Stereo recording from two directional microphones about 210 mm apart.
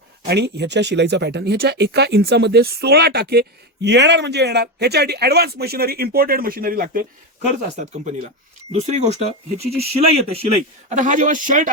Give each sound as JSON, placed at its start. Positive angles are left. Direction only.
{"t": 0.3, "sound": "speech", "side_deg": -55}
{"t": 8.7, "sound": "speech", "side_deg": -30}